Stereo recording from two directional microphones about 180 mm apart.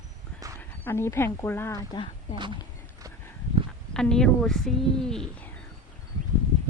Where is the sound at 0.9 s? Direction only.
15° left (ahead or behind).